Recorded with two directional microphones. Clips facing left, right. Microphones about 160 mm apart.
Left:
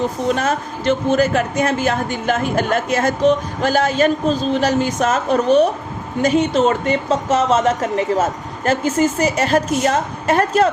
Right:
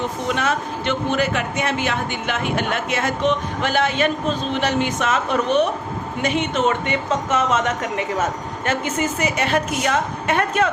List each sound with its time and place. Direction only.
0.3 s speech: 40° left (ahead or behind)